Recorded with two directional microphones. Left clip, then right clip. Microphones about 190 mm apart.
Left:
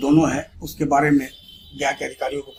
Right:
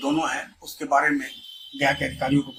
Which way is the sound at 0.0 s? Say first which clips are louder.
Left 6 dB; 50° left (ahead or behind).